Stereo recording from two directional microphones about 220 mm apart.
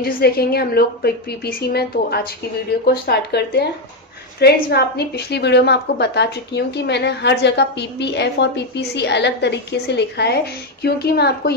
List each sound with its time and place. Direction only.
0.0 s a woman's voice: 45° left (ahead or behind)